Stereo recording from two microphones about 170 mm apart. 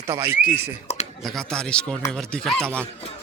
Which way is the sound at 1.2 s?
5° left (ahead or behind).